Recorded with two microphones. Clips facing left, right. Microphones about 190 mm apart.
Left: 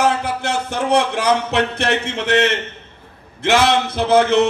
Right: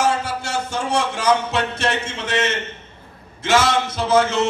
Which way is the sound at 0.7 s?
60° left (ahead or behind).